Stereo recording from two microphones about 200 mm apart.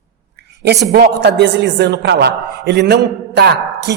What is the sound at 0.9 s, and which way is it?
A man's voice, 55° right (ahead or behind).